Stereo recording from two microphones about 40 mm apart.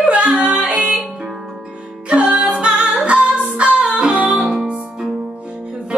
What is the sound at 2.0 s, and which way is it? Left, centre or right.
Music, right.